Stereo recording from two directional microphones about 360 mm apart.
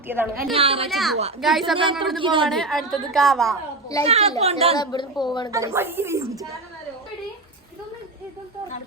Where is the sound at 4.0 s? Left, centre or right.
Centre.